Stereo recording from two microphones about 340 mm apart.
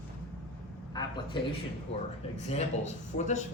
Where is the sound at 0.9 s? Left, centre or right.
Centre.